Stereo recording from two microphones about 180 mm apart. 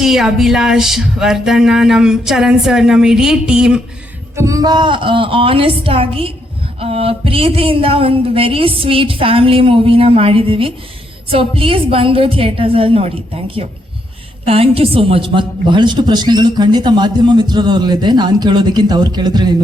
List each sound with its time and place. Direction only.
0.0 s music: centre (ahead or behind)
4.4 s a woman's voice: 20° right (ahead or behind)
6.7 s a sound: 35° right (ahead or behind)
14.4 s a woman's voice: 30° right (ahead or behind)